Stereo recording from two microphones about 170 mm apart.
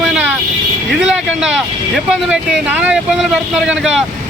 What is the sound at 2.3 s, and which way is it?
Speech, 5° right (ahead or behind).